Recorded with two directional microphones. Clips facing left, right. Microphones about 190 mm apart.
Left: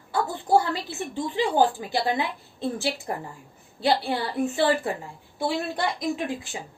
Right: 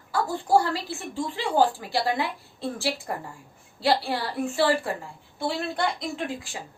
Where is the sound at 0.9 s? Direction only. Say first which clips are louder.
Left 1 dB; 20° left (ahead or behind).